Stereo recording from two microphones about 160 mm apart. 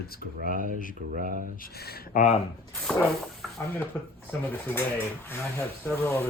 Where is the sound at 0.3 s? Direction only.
60° right (ahead or behind).